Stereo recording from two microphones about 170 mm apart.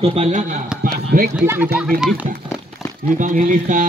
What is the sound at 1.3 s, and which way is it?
Speech, 10° right (ahead or behind).